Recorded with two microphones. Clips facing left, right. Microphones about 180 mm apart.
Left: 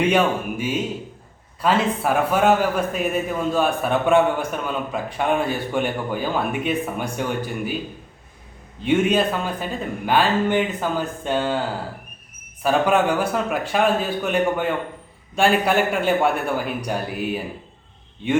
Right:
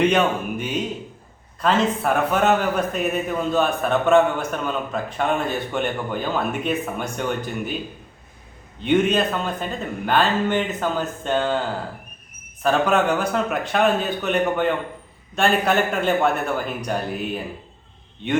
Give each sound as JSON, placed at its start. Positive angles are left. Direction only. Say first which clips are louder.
{"t": 0.0, "sound": "a man's voice", "louder": "even", "side_deg": 10}
{"t": 8.8, "sound": "a man's voice", "louder": "even", "side_deg": 5}
{"t": 12.6, "sound": "a man's voice", "louder": "left 1 dB", "side_deg": 10}